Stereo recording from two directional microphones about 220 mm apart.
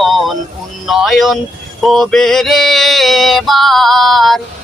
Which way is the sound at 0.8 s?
Centre (ahead or behind).